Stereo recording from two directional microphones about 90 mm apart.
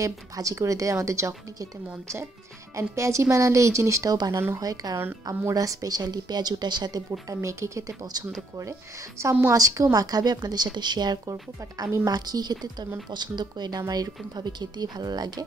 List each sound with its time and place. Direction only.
0.0 s speech: 40° right (ahead or behind)
2.7 s speech: 35° right (ahead or behind)
9.2 s a woman's voice: 25° right (ahead or behind)
9.5 s speech: 40° right (ahead or behind)
11.8 s speech: 40° right (ahead or behind)